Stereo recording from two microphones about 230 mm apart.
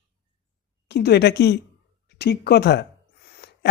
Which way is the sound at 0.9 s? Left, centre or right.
Left.